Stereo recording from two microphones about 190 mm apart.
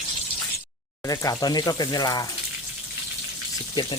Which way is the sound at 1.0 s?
20° left (ahead or behind).